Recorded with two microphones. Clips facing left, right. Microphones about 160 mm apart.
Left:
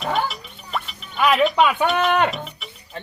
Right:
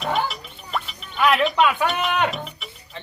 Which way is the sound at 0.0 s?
Centre (ahead or behind).